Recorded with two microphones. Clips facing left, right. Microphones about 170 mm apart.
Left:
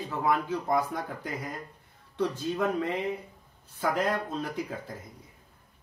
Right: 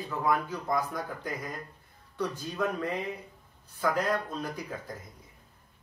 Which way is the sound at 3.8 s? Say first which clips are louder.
Even; 25° left (ahead or behind).